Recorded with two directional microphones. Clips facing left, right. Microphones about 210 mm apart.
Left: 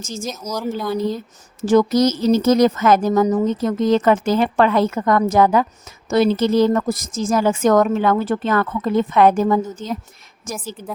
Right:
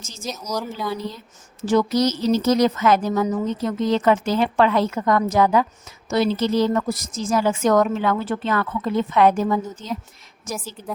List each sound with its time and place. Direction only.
0.0 s a woman's voice: 45° left (ahead or behind)